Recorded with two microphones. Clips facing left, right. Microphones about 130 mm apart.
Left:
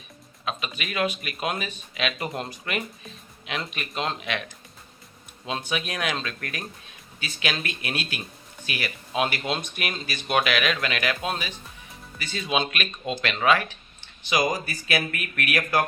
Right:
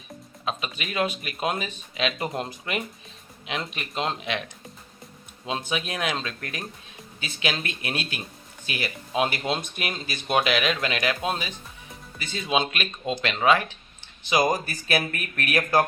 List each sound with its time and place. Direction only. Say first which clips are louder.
0.4 s speech: right 1 dB; 30° right (ahead or behind)
5.5 s speech: right 1 dB; 20° right (ahead or behind)
14.4 s speech: right 2 dB; 45° right (ahead or behind)